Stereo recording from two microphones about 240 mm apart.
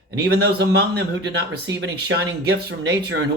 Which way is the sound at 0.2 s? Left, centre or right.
Right.